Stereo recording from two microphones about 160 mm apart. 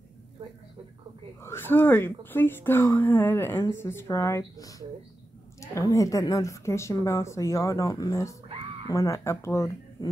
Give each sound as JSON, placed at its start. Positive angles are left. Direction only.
{"t": 1.4, "sound": "a woman's voice", "side_deg": 15}